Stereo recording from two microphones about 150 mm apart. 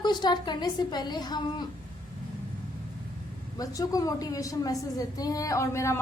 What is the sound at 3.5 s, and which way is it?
A woman's voice, 25° left (ahead or behind).